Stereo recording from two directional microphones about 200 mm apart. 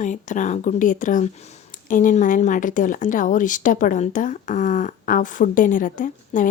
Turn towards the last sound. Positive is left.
turn(degrees=40)  # may be behind; listen again after turning